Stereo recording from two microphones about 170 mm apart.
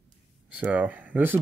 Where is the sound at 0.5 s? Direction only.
10° right (ahead or behind).